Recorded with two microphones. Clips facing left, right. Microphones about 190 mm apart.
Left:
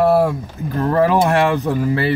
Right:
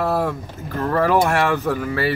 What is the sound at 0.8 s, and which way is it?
Speech, 20° left (ahead or behind).